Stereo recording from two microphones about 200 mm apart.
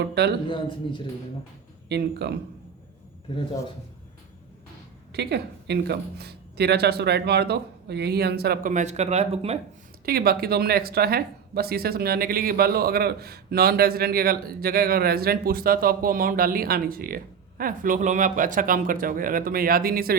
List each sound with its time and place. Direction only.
0.0 s speech: 55° right (ahead or behind)
0.4 s a man's voice: 25° left (ahead or behind)
1.9 s speech: 55° right (ahead or behind)
5.1 s speech: 55° right (ahead or behind); by 9.6 s 30° right (ahead or behind)
10.1 s speech: 50° right (ahead or behind)